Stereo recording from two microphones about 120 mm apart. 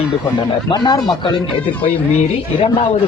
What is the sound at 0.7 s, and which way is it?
Speech, 35° left (ahead or behind).